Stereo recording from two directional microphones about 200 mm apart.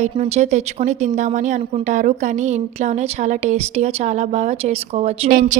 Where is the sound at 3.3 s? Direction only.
35° right (ahead or behind).